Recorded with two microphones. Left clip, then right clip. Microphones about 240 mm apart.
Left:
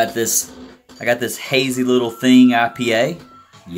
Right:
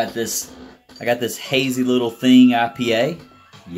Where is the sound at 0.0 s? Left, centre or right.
Centre.